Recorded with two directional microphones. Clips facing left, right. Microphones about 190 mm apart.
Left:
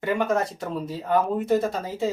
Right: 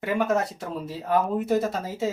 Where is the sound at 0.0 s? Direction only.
Centre (ahead or behind).